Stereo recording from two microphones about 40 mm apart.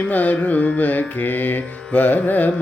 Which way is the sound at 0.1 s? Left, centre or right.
Left.